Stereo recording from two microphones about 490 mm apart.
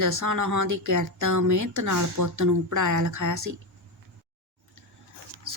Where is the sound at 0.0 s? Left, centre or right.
Right.